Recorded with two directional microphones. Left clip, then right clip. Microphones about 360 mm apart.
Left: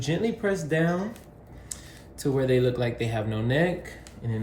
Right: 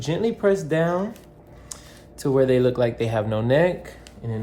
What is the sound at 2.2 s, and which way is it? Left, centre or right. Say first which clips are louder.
Speech: right 5 dB; centre.